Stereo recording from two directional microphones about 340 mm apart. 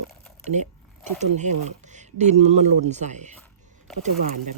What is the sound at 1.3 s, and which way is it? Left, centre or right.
Speech, right.